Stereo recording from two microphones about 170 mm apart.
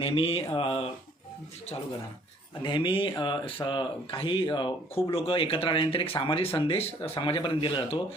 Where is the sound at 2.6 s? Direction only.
25° left (ahead or behind).